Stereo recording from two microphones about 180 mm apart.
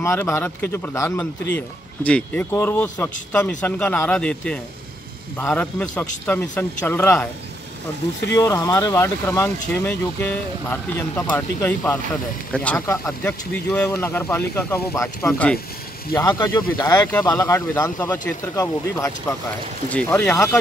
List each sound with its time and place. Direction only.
0.0 s speech: 15° left (ahead or behind)
8.4 s speech: 15° left (ahead or behind)
19.9 s speech: 10° left (ahead or behind)